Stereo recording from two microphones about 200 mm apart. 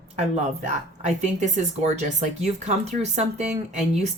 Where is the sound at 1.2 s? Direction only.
35° right (ahead or behind).